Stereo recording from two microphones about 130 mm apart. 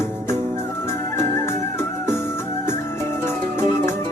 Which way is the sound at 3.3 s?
20° left (ahead or behind).